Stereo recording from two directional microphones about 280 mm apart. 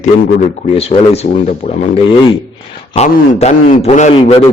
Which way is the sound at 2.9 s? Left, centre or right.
Left.